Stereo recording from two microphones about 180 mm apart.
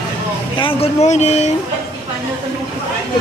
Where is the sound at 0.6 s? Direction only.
30° left (ahead or behind).